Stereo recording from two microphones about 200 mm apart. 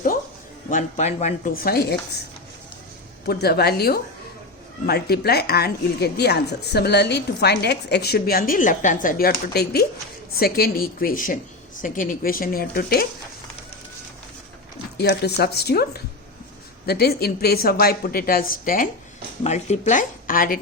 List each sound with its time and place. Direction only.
0.7 s speech: 40° left (ahead or behind)
1.6 s a woman's voice: 50° left (ahead or behind)
3.2 s a woman's voice: 55° left (ahead or behind)
14.9 s a woman's voice: 55° left (ahead or behind)